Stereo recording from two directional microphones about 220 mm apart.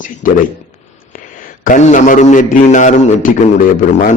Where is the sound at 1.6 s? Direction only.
35° left (ahead or behind).